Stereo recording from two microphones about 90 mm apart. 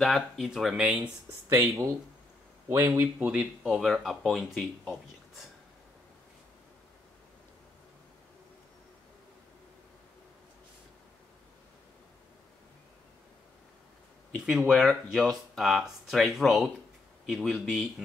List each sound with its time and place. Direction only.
0.0 s speech: centre (ahead or behind)
1.5 s speech: 35° right (ahead or behind)
3.0 s speech: 15° right (ahead or behind)
3.7 s speech: centre (ahead or behind)
14.3 s speech: 5° right (ahead or behind)